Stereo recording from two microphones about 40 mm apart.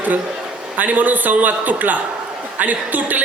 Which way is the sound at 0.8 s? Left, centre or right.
Right.